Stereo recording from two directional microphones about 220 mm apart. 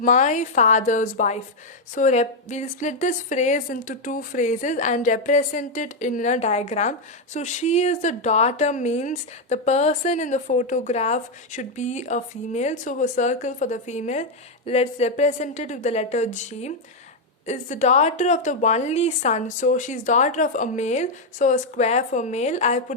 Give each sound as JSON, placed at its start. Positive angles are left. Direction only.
{"t": 0.0, "sound": "speech", "side_deg": 35}